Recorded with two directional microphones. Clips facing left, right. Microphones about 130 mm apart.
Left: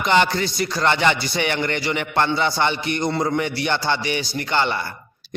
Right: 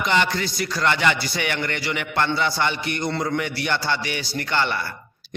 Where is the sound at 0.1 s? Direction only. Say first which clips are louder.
Left 5 dB; 30° left (ahead or behind).